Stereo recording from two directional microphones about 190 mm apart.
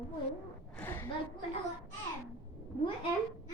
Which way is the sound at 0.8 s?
10° left (ahead or behind).